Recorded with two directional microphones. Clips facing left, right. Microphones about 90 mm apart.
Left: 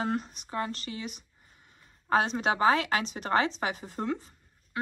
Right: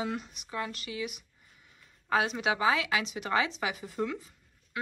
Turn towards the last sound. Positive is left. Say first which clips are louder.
# left 1 dB
turn(degrees=35)  # may be behind; listen again after turning